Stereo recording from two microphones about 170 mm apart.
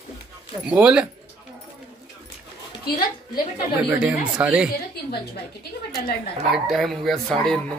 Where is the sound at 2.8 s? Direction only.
60° left (ahead or behind).